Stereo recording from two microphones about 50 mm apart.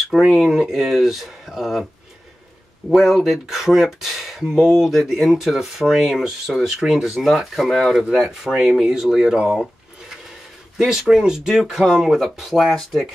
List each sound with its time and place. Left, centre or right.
0.3 s speech: centre
2.9 s speech: centre
10.8 s speech: centre